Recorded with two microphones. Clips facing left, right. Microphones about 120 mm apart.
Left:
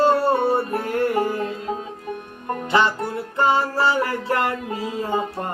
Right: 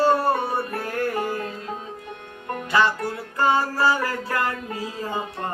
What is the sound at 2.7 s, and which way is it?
Music, 25° left (ahead or behind).